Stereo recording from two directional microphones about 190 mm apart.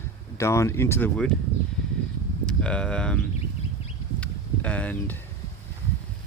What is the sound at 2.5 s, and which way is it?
Speech, 5° left (ahead or behind).